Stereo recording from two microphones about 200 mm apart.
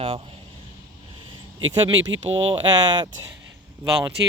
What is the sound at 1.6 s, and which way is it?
Speech, 80° right.